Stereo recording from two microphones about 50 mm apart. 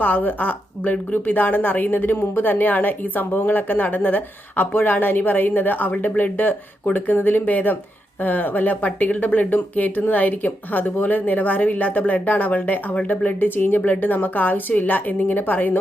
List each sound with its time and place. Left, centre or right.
0.0 s a woman's voice: left